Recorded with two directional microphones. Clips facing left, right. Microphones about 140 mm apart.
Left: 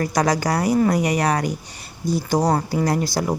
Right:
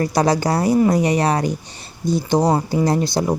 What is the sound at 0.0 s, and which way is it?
A woman's voice, 30° right (ahead or behind).